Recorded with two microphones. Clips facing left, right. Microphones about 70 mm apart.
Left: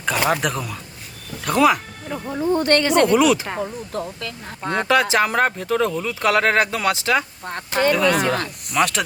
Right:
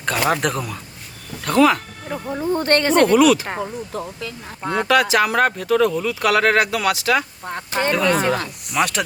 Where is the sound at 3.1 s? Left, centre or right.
Left.